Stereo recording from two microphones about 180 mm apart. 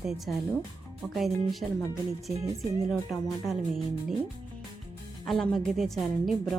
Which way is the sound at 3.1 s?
Centre (ahead or behind).